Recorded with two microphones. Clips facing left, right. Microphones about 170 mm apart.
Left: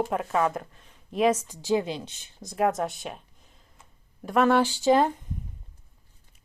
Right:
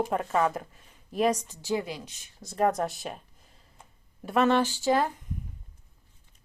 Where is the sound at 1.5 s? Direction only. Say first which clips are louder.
Left 5 dB; 20° left (ahead or behind).